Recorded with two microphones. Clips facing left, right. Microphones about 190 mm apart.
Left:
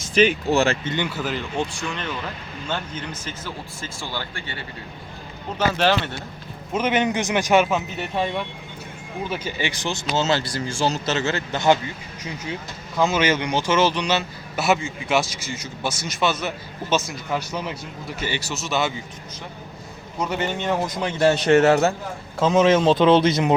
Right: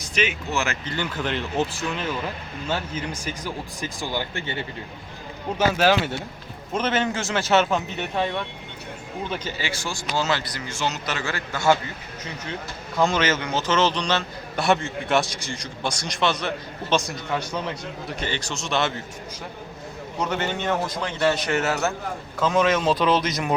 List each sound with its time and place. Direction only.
0.0 s speech: 30° left (ahead or behind)
0.9 s a man's voice: 5° left (ahead or behind); by 4.5 s 20° right (ahead or behind)
5.5 s speech: 10° right (ahead or behind)
6.7 s a man's voice: 15° left (ahead or behind)
13.0 s a man's voice: 5° left (ahead or behind)
20.2 s a man's voice: 10° left (ahead or behind)
21.4 s speech: 35° left (ahead or behind)